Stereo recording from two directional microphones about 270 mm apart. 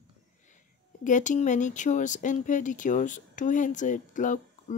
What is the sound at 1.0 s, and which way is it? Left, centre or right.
Speech, left.